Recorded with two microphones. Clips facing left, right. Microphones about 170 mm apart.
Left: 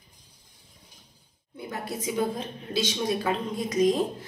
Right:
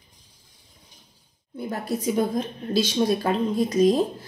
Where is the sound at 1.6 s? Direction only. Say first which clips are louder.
Right 6 dB; 40° right (ahead or behind).